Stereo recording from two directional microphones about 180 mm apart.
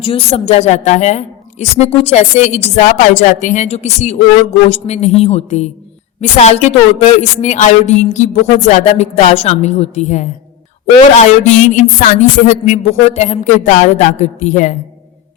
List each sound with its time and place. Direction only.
0.0 s a woman's voice: 30° left (ahead or behind)